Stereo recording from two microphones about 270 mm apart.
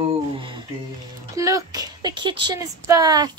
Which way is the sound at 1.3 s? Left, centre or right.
Centre.